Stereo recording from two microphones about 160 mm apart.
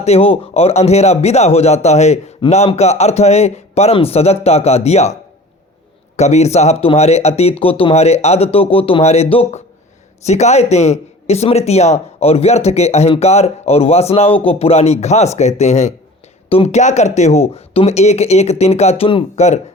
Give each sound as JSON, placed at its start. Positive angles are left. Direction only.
{"t": 0.0, "sound": "speech", "side_deg": 40}
{"t": 6.1, "sound": "speech", "side_deg": 45}